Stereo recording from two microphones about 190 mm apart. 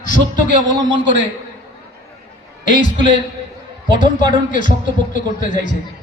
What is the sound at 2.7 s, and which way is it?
Speech, 45° left (ahead or behind).